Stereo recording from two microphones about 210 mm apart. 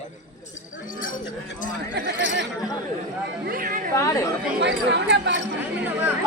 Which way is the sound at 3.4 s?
40° right (ahead or behind).